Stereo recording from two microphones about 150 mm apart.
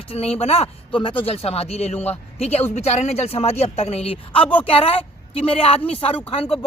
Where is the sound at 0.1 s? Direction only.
45° left (ahead or behind).